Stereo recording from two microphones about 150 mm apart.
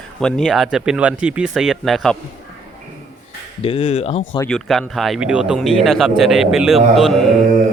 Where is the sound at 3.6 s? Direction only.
40° left (ahead or behind).